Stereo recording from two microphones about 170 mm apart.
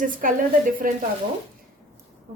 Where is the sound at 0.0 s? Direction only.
55° right (ahead or behind).